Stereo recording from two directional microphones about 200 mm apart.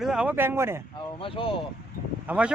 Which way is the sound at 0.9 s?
25° left (ahead or behind).